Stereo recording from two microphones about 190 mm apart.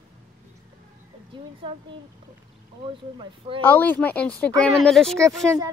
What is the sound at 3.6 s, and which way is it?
Speech, 10° left (ahead or behind).